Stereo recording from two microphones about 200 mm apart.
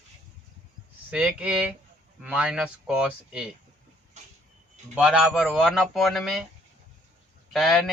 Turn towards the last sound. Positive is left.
turn(degrees=0)  # may be behind; listen again after turning